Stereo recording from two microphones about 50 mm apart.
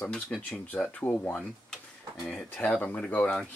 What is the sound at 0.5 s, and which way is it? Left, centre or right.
Speech, left.